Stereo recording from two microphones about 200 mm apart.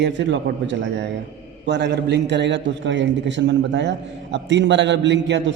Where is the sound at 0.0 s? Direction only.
65° right (ahead or behind).